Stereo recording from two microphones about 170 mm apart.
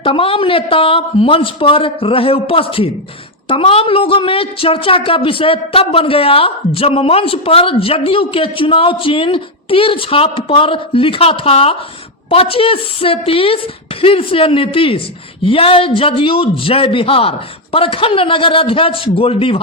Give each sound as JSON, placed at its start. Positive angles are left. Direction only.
{"t": 0.0, "sound": "a woman's voice", "side_deg": 30}